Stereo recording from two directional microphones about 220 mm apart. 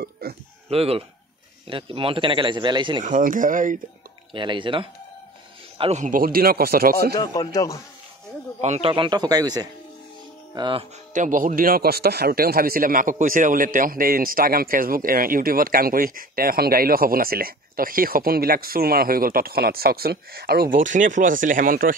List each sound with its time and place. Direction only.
0.0 s a sound: 45° right (ahead or behind)
0.7 s speech: 25° right (ahead or behind)
3.0 s speech: 35° right (ahead or behind)
4.3 s speech: 20° right (ahead or behind); by 7.2 s 45° right (ahead or behind)
7.2 s a man's voice: 15° left (ahead or behind)
8.5 s speech: 30° right (ahead or behind)